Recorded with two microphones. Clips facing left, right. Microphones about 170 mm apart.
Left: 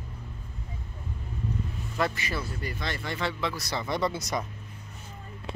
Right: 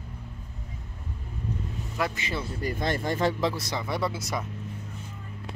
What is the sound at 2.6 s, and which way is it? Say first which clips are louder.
Speech: right 6 dB; 50° right (ahead or behind).